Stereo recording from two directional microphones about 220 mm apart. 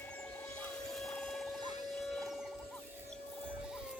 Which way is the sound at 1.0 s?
Centre (ahead or behind).